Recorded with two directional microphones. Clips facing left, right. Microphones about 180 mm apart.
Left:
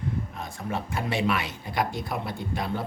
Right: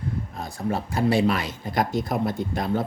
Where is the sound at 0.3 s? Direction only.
40° right (ahead or behind).